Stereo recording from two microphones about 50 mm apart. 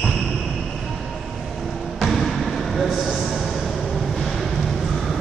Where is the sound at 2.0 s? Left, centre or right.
Centre.